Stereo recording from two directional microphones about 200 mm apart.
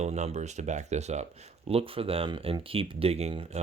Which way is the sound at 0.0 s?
35° right (ahead or behind).